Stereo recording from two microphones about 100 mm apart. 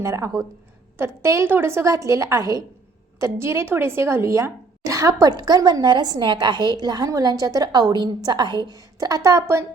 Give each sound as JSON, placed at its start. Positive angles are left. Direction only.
{"t": 0.0, "sound": "a woman's voice", "side_deg": -30}